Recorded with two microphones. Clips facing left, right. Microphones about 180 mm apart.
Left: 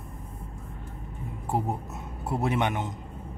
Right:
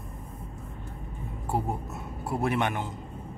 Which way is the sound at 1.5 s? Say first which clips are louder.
Left 1 dB; 20° left (ahead or behind).